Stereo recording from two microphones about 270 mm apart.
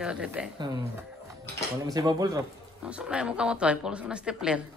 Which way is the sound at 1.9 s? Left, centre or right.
Centre.